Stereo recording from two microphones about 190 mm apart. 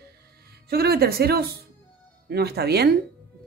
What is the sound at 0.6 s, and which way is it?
Speech, 55° right (ahead or behind).